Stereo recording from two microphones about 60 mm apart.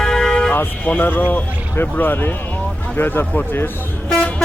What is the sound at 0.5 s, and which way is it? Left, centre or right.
Speech, left.